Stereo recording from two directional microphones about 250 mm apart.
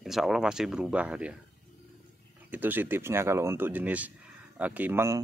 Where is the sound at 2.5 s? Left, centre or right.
Centre.